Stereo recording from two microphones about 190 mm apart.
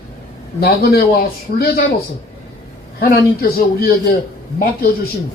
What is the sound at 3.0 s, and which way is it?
A man's voice, 50° left (ahead or behind).